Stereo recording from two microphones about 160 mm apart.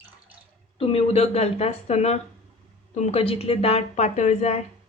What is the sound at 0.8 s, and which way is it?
A woman's voice, 40° left (ahead or behind).